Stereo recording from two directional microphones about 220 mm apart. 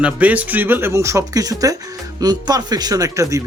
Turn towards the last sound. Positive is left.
turn(degrees=-15)  # may be behind; listen again after turning